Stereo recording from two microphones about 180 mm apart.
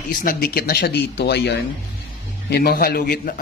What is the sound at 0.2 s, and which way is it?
Speech, 55° left (ahead or behind).